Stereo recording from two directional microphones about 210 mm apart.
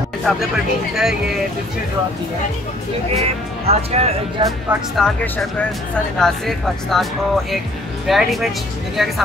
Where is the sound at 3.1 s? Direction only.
30° right (ahead or behind).